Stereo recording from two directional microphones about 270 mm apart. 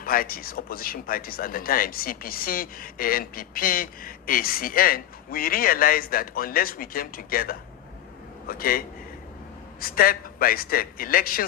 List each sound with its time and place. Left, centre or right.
0.0 s speech: left
9.8 s speech: left